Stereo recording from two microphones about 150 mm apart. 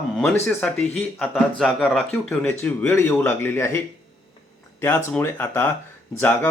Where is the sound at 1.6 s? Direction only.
Centre (ahead or behind).